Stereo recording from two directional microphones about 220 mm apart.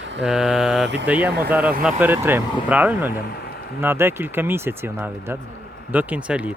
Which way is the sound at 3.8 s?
10° right (ahead or behind).